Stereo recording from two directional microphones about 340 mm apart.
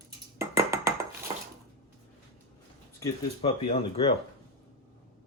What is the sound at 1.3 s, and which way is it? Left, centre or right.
Dishes, centre.